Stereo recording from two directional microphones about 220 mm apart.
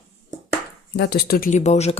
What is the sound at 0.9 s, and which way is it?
Speech, 45° left (ahead or behind).